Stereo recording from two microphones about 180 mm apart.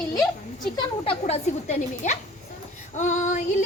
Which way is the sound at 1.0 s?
35° left (ahead or behind).